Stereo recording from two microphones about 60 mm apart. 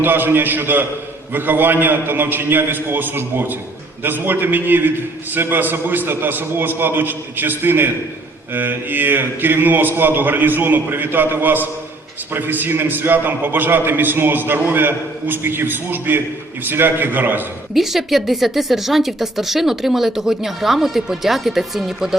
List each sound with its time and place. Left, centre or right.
0.0 s a man's voice: right
17.7 s a woman's voice: centre